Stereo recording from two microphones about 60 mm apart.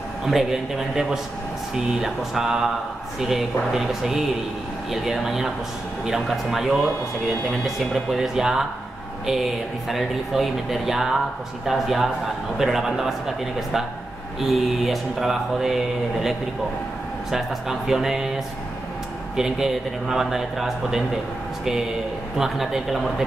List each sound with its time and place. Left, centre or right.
0.2 s speech: centre
14.8 s speech: centre
19.3 s speech: centre
22.4 s speech: centre